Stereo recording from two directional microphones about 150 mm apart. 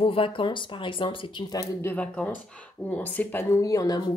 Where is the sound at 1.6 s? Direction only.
15° left (ahead or behind).